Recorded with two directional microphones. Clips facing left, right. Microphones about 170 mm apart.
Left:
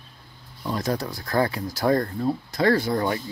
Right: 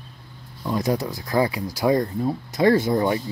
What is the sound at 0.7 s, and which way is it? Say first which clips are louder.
Speech: right 4 dB; 15° right (ahead or behind).